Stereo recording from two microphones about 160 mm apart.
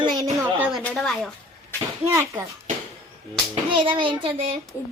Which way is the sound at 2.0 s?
15° right (ahead or behind).